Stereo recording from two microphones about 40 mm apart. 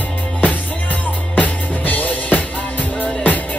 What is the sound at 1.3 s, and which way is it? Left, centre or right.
Music, left.